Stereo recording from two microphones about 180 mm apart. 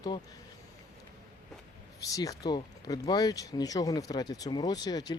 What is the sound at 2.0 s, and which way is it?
Speech, 20° left (ahead or behind).